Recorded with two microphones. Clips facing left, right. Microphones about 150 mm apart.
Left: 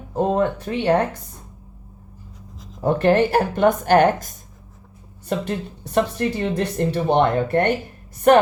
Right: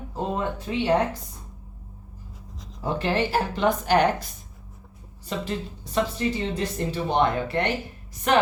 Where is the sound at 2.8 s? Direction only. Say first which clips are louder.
Left 8 dB; 55° left (ahead or behind).